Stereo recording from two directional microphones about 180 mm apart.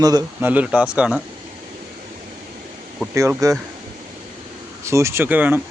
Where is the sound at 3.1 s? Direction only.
15° right (ahead or behind).